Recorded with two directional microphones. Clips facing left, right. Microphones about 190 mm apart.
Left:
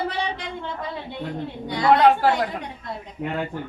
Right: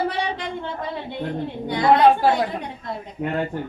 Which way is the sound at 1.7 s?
15° right (ahead or behind).